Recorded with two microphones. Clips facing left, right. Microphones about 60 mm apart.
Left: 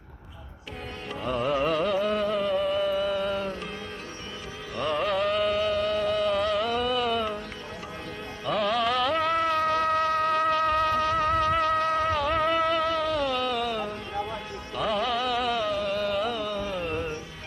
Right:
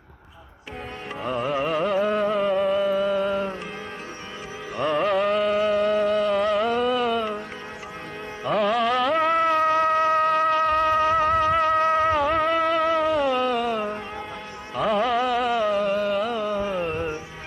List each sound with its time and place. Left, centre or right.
1.2 s carnatic music: centre
2.0 s music: right
4.8 s carnatic music: centre
5.5 s music: right
6.1 s music: centre
8.5 s music: centre
10.9 s music: centre
11.3 s music: centre
11.8 s music: right
12.9 s a sound: right
13.4 s music: centre
13.7 s music: right
15.3 s music: centre
16.3 s music: right